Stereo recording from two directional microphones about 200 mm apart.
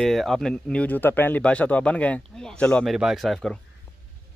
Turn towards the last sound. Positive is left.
turn(degrees=0)  # may be behind; listen again after turning